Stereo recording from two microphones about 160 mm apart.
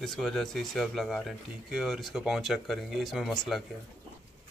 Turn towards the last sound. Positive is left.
turn(degrees=0)  # may be behind; listen again after turning